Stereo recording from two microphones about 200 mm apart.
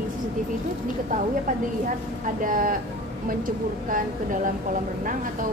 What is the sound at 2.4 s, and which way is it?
A woman's voice, 45° right (ahead or behind).